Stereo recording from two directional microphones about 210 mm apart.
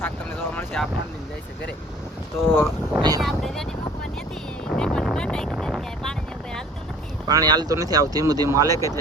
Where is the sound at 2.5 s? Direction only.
5° left (ahead or behind).